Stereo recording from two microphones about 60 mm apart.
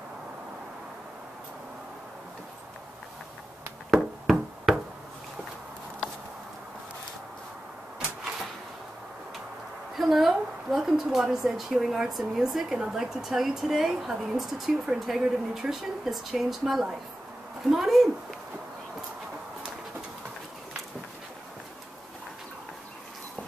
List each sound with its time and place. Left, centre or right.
3.9 s music: centre
9.9 s a woman's voice: centre